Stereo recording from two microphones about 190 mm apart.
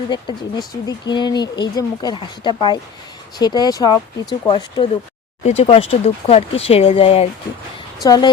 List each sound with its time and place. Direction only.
0.1 s speech: 25° left (ahead or behind)
8.0 s speech: 20° left (ahead or behind)